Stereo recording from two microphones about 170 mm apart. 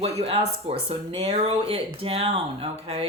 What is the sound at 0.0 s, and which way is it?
Speech, 35° right (ahead or behind).